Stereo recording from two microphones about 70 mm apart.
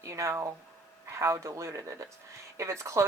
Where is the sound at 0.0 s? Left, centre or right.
Right.